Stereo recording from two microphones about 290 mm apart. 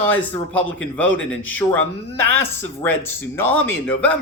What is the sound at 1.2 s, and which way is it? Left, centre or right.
Speech, left.